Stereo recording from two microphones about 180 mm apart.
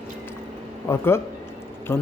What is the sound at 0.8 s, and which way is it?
A man's voice, 15° left (ahead or behind).